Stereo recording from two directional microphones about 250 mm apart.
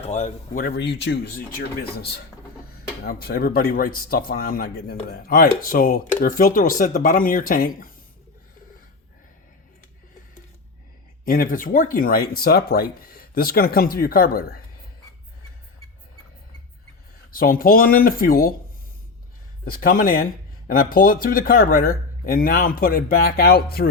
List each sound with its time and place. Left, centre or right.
0.0 s speech: left
11.3 s speech: left
17.3 s speech: left
19.8 s speech: left